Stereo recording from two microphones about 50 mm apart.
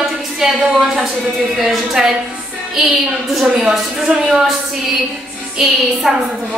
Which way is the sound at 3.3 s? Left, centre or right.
Centre.